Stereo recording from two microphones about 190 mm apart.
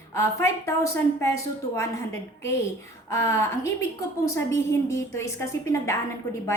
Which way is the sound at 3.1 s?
15° left (ahead or behind).